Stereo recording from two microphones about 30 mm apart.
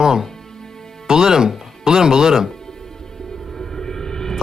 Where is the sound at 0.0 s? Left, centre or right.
Right.